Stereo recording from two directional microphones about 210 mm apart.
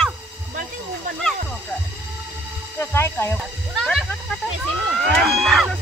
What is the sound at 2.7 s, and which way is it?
Speech, 10° left (ahead or behind).